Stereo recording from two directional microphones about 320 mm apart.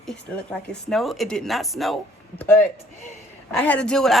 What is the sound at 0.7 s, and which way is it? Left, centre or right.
Speech, centre.